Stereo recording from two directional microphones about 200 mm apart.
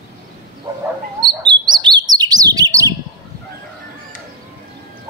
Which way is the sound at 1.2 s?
20° right (ahead or behind).